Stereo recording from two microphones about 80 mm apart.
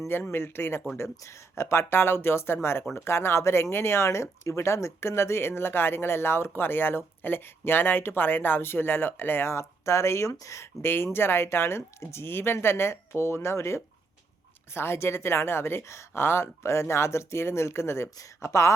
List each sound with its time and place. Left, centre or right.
0.1 s speech: left